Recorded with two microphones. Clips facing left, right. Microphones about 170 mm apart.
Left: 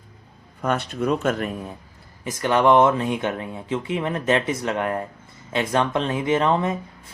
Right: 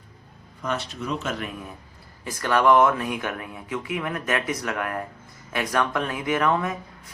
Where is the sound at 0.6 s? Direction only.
55° left (ahead or behind).